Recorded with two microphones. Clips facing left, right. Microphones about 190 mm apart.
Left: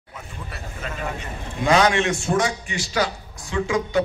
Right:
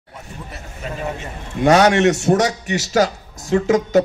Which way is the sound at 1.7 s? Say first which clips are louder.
Right 5 dB; 40° right (ahead or behind).